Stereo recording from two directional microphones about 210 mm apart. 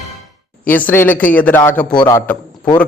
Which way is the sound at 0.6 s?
10° left (ahead or behind).